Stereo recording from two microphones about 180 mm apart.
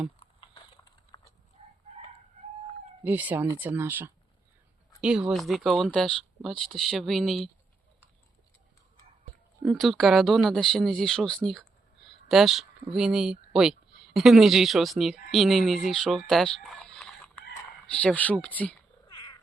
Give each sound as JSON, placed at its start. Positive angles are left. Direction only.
{"t": 0.2, "sound": "typing", "side_deg": 30}
{"t": 1.1, "sound": "dog", "side_deg": 25}
{"t": 1.6, "sound": "chicken", "side_deg": -35}
{"t": 3.0, "sound": "speech", "side_deg": -10}
{"t": 9.6, "sound": "speech", "side_deg": 0}
{"t": 19.0, "sound": "cat", "side_deg": 25}